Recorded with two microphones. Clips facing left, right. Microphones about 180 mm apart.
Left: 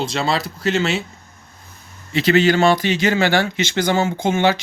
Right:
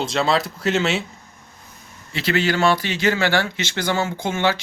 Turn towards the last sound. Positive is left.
turn(degrees=15)  # may be behind; listen again after turning